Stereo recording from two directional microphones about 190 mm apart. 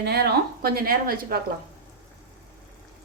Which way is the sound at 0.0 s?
60° right (ahead or behind).